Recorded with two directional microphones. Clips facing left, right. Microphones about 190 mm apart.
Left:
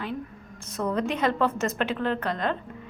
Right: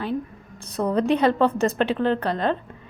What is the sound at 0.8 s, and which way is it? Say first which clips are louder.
A woman's voice: right 6 dB; 35° right (ahead or behind).